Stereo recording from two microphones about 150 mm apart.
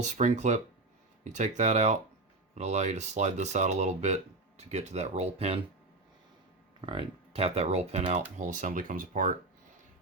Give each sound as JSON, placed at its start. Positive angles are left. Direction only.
{"t": 0.2, "sound": "speech", "side_deg": -50}
{"t": 6.8, "sound": "speech", "side_deg": -40}
{"t": 8.4, "sound": "speech", "side_deg": -55}